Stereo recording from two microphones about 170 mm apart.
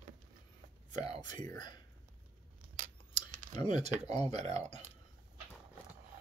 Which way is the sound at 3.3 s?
50° right (ahead or behind).